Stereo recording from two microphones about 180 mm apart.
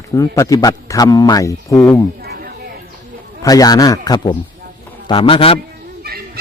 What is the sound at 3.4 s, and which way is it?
A man's voice, 20° left (ahead or behind).